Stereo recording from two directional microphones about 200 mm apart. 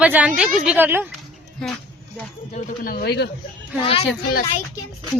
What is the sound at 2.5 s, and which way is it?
Speech, 45° left (ahead or behind).